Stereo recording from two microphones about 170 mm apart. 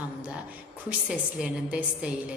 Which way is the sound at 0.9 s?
5° right (ahead or behind).